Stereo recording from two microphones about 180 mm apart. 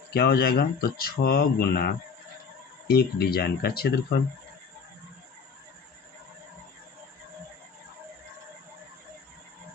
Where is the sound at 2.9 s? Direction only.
60° left (ahead or behind).